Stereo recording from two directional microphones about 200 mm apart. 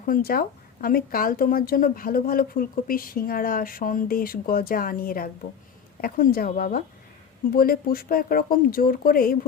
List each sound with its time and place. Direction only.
0.0 s a woman's voice: 45° left (ahead or behind)